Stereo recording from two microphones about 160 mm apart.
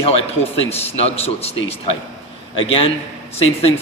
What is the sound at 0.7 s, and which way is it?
A man's voice, 40° left (ahead or behind).